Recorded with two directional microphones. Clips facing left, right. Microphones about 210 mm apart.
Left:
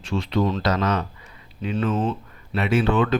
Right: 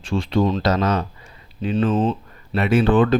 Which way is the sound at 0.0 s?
30° right (ahead or behind).